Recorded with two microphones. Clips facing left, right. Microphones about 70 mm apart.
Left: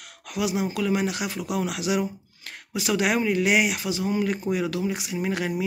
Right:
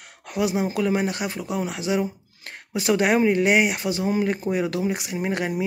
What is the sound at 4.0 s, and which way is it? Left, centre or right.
Speech, right.